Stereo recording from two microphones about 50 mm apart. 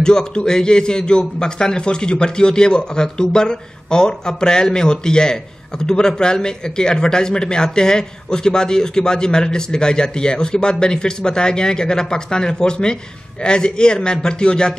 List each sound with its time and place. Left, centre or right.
0.0 s a man's voice: centre